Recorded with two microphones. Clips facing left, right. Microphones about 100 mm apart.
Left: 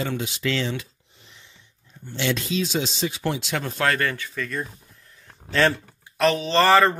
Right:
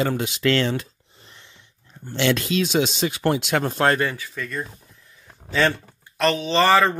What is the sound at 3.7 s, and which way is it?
Speech, 35° right (ahead or behind).